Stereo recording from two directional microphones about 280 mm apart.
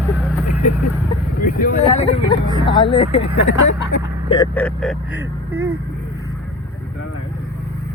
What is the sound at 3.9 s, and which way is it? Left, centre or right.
Speech, left.